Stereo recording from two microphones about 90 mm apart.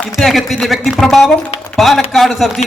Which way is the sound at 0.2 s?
Centre (ahead or behind).